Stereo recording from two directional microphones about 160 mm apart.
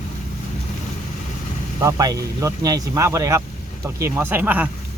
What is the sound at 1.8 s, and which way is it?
Speech, 20° right (ahead or behind).